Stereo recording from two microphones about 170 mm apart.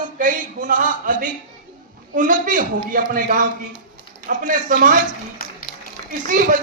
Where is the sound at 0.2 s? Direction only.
50° right (ahead or behind).